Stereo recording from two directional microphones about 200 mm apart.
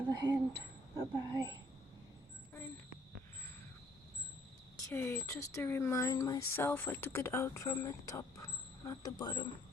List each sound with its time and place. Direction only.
0.1 s a sound: 15° right (ahead or behind)
0.9 s speech: 20° right (ahead or behind)
4.8 s speech: 15° left (ahead or behind)